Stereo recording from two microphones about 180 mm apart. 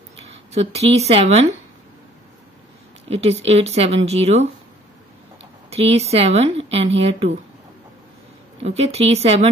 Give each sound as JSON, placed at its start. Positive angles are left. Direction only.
{"t": 0.5, "sound": "speech", "side_deg": -35}
{"t": 3.1, "sound": "speech", "side_deg": -35}
{"t": 8.6, "sound": "speech", "side_deg": -35}